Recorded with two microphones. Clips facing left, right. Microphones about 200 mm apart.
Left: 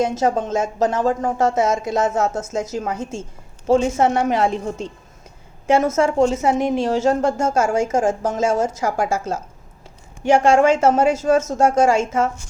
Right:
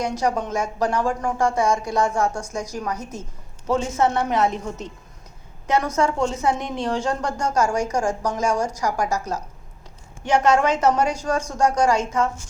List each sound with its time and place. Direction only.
0.2 s a woman's voice: 25° left (ahead or behind)
5.7 s a woman's voice: 25° left (ahead or behind)